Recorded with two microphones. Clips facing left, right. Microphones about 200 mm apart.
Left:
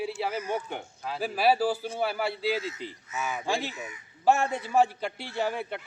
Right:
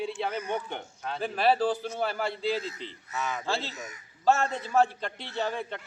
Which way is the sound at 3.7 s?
40° right (ahead or behind).